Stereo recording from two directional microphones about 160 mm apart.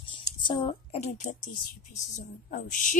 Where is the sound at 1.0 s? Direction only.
50° left (ahead or behind).